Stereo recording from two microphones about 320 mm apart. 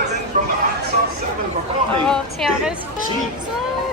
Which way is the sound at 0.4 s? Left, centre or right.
Right.